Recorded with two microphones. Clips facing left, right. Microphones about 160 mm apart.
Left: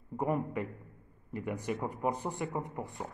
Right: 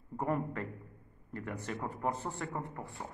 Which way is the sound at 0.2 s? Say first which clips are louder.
Left 2 dB; 10° left (ahead or behind).